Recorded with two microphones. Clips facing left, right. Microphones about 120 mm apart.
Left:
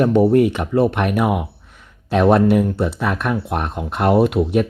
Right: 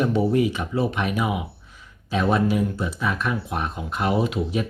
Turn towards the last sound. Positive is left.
turn(degrees=60)  # may be behind; listen again after turning